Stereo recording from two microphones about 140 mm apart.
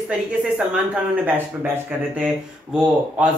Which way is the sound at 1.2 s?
15° right (ahead or behind).